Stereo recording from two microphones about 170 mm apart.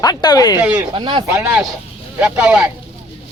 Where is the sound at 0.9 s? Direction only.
30° right (ahead or behind).